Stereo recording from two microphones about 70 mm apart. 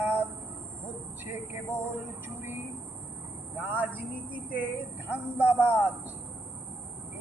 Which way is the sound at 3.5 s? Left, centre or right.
Right.